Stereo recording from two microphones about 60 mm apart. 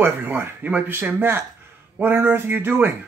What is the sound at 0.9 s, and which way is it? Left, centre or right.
Speech, right.